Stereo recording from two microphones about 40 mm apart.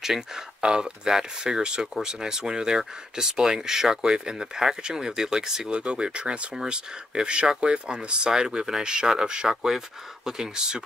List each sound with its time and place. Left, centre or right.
0.0 s speech: centre